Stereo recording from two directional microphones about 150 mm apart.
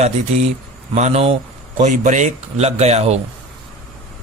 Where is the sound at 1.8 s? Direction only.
55° right (ahead or behind).